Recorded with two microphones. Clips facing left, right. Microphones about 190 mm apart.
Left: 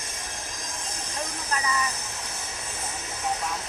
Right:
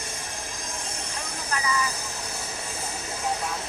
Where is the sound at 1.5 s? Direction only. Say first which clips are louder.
Right 1 dB; 30° left (ahead or behind).